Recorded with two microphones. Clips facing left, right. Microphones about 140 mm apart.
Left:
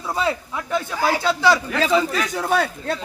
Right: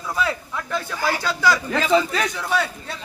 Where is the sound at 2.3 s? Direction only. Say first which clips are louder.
Left 3 dB; 50° left (ahead or behind).